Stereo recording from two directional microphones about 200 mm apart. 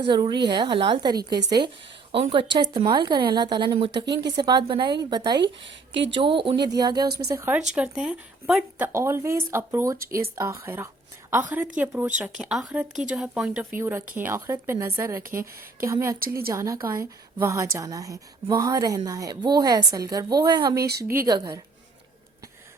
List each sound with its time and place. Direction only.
0.0 s a woman's voice: 25° right (ahead or behind)
5.9 s speech: 65° right (ahead or behind)
6.2 s a woman's voice: 25° right (ahead or behind)
15.2 s speech: 45° right (ahead or behind)
15.8 s speech: 15° right (ahead or behind)
16.2 s speech: 50° right (ahead or behind)
16.5 s a woman's voice: 15° right (ahead or behind)
20.7 s speech: 55° right (ahead or behind)
21.2 s a woman's voice: 20° right (ahead or behind)